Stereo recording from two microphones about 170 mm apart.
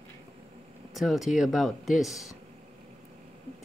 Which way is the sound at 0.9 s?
Centre (ahead or behind).